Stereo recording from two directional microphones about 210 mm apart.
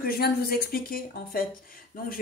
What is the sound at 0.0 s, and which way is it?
Speech, 45° left (ahead or behind).